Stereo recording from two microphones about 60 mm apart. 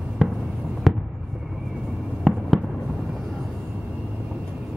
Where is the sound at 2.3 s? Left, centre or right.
Centre.